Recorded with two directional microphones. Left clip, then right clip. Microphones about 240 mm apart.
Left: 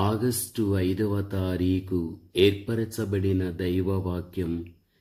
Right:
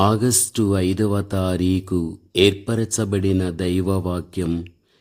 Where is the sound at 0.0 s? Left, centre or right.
Right.